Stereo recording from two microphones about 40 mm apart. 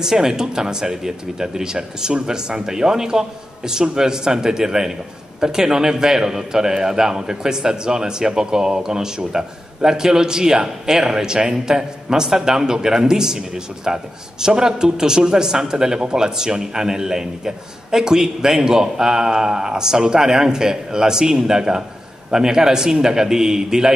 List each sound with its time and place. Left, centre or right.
0.0 s a man's voice: centre